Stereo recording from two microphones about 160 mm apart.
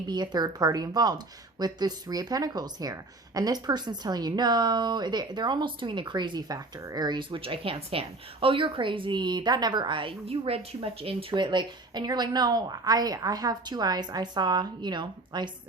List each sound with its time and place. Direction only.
0.1 s speech: 25° right (ahead or behind)